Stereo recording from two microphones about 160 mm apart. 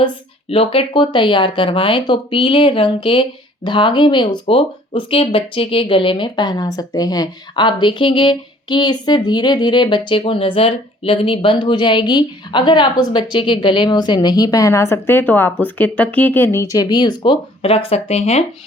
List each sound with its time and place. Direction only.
0.0 s speech: 35° left (ahead or behind)